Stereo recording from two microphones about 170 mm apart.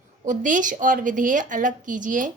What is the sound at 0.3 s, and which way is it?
Speech, 50° right (ahead or behind).